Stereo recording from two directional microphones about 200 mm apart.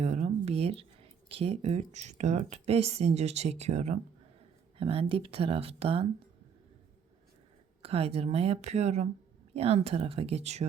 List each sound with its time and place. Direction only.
0.0 s a sound: 35° right (ahead or behind)
1.3 s speech: 30° right (ahead or behind)
7.8 s speech: 30° right (ahead or behind)